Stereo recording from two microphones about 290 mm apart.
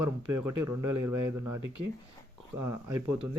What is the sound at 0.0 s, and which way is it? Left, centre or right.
Speech, right.